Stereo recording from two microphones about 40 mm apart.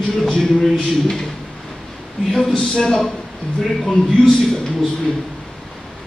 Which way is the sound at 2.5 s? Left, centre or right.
Centre.